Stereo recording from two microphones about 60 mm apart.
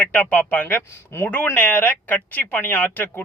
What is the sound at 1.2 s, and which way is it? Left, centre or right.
Speech, left.